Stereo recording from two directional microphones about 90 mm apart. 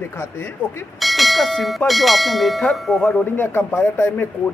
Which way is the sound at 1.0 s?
Centre (ahead or behind).